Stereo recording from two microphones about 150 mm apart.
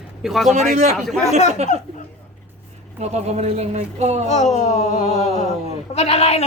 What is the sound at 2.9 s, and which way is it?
Speech, 50° right (ahead or behind).